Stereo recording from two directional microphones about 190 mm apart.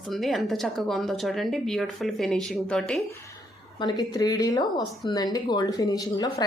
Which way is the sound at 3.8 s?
20° left (ahead or behind).